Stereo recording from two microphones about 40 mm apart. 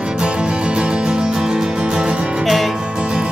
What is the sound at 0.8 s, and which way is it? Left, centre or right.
Music, right.